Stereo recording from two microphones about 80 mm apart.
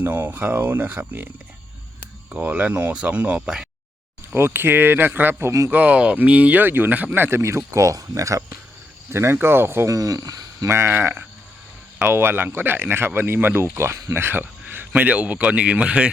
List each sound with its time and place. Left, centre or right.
0.0 s speech: right
2.3 s speech: centre
4.4 s speech: right
5.5 s speech: right
5.7 s speech: centre
9.9 s speech: right
10.7 s a man's voice: right; by 16.0 s centre